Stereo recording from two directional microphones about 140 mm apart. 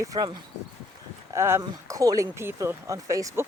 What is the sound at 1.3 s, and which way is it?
Speech, 20° right (ahead or behind).